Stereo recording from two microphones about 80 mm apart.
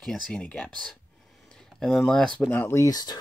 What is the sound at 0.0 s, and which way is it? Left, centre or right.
Speech, centre.